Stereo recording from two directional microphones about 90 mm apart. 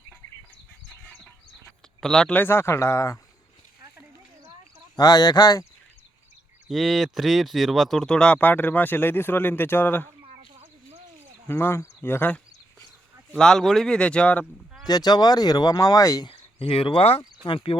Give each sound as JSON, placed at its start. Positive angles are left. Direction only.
{"t": 1.0, "sound": "a sound", "side_deg": 15}
{"t": 2.0, "sound": "speech", "side_deg": 5}
{"t": 2.3, "sound": "speech", "side_deg": 25}
{"t": 4.9, "sound": "speech", "side_deg": 45}
{"t": 6.7, "sound": "speech", "side_deg": -5}
{"t": 8.4, "sound": "speech", "side_deg": 20}
{"t": 11.4, "sound": "speech", "side_deg": 25}
{"t": 13.3, "sound": "speech", "side_deg": 5}
{"t": 14.8, "sound": "speech", "side_deg": 50}
{"t": 16.2, "sound": "speech", "side_deg": 90}
{"t": 17.4, "sound": "speech", "side_deg": 70}